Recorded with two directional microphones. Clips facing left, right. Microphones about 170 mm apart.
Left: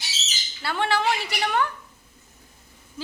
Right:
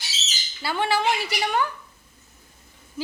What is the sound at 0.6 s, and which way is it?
Speech, 5° right (ahead or behind).